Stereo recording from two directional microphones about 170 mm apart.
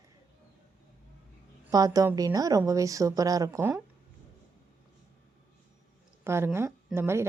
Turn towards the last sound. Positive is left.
turn(degrees=-15)  # may be behind; listen again after turning